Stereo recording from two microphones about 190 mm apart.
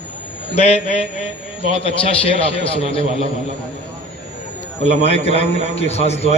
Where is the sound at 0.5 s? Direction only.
35° left (ahead or behind).